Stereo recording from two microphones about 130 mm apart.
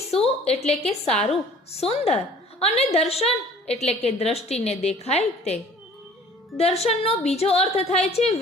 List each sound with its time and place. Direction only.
0.1 s a woman's voice: 50° left (ahead or behind)
6.6 s a woman's voice: 50° left (ahead or behind)